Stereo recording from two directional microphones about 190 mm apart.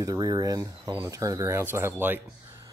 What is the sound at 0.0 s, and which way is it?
Speech, 20° right (ahead or behind).